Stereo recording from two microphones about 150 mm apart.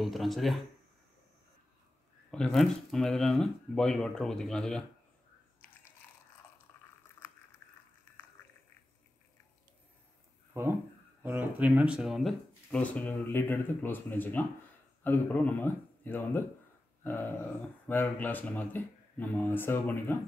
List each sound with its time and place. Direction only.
0.0 s speech: centre (ahead or behind)
2.3 s speech: 5° left (ahead or behind)
6.7 s a sound: 10° left (ahead or behind)
10.6 s speech: 15° right (ahead or behind); by 20.2 s 15° left (ahead or behind)